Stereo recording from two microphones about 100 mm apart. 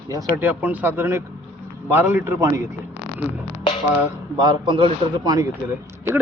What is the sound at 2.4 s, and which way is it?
Speech, 30° right (ahead or behind).